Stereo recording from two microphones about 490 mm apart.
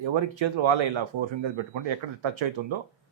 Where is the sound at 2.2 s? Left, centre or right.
Right.